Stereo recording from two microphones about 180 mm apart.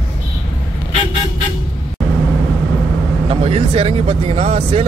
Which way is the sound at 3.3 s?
35° right (ahead or behind).